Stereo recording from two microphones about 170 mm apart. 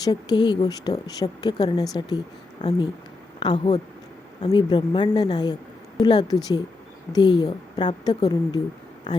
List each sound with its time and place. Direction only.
0.0 s speech: 25° left (ahead or behind)